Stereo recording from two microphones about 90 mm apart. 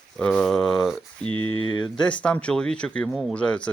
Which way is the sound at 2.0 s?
15° left (ahead or behind).